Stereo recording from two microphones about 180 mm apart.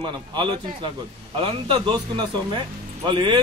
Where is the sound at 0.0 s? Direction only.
25° right (ahead or behind).